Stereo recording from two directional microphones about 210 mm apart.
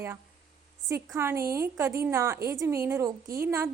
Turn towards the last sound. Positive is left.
turn(degrees=-10)  # may be behind; listen again after turning